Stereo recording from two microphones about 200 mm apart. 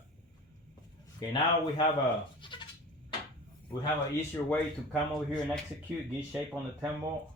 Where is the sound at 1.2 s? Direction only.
20° left (ahead or behind).